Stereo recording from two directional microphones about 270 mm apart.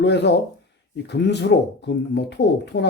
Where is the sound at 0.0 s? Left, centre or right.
Left.